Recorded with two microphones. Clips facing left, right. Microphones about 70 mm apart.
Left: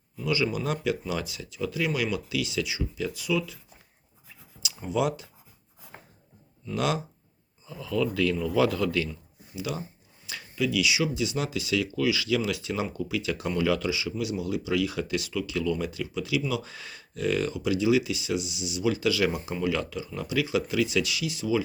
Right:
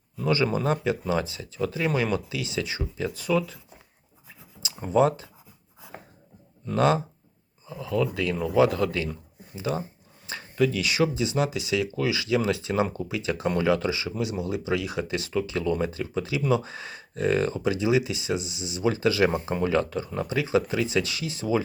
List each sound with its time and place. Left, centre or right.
0.3 s speech: right
4.8 s speech: right
6.7 s speech: right
10.2 s a sound: right
10.5 s speech: right
11.1 s speech: right